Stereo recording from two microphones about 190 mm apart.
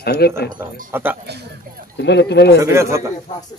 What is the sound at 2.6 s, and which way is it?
Speech, 15° right (ahead or behind).